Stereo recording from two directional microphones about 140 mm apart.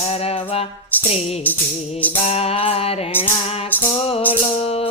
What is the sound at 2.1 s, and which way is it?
Music, 45° left (ahead or behind).